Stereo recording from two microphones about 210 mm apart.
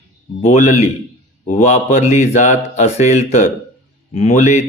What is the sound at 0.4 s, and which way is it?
Speech, 35° left (ahead or behind).